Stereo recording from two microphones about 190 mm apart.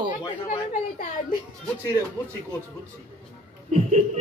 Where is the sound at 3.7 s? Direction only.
35° right (ahead or behind).